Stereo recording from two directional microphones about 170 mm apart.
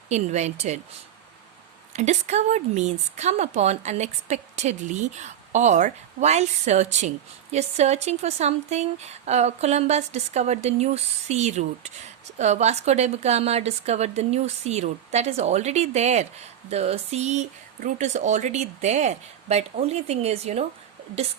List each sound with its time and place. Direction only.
0.1 s speech: 40° right (ahead or behind)
1.9 s speech: 40° right (ahead or behind)